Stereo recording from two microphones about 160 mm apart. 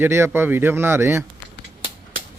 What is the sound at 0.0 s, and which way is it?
Speech, 15° right (ahead or behind).